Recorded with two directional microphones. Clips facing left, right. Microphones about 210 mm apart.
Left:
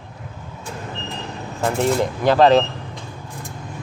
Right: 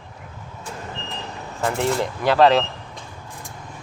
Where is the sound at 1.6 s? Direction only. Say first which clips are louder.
Left 3 dB; 15° left (ahead or behind).